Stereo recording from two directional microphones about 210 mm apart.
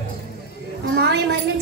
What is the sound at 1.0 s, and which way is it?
Speech, 50° right (ahead or behind).